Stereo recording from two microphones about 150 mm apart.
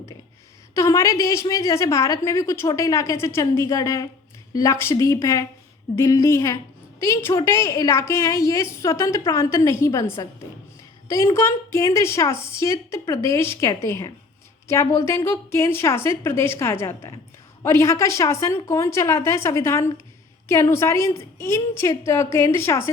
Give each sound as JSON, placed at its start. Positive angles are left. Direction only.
{"t": 0.7, "sound": "a woman's voice", "side_deg": 20}
{"t": 11.3, "sound": "a woman's voice", "side_deg": 15}